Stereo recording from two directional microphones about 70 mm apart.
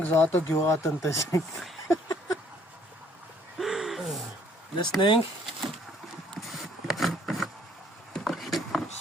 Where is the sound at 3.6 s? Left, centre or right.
Centre.